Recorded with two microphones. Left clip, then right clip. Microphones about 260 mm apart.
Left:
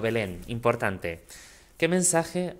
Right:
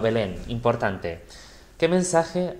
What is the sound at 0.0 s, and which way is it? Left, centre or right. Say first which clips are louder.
Speech: right 4 dB; left.